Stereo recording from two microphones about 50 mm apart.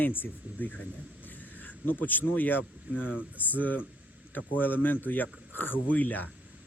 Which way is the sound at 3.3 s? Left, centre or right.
Left.